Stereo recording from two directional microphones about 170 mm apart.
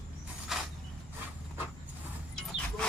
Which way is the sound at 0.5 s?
Centre (ahead or behind).